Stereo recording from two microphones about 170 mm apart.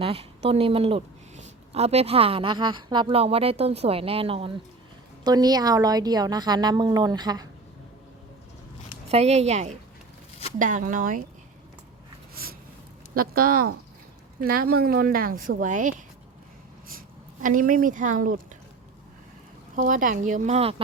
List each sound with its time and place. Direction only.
0.0 s speech: 35° right (ahead or behind)
5.2 s a woman's voice: 25° right (ahead or behind)
9.0 s a woman's voice: 40° right (ahead or behind)
13.1 s a woman's voice: 60° right (ahead or behind)
17.4 s a woman's voice: 55° right (ahead or behind)
19.7 s a woman's voice: 50° right (ahead or behind); by 20.8 s 35° right (ahead or behind)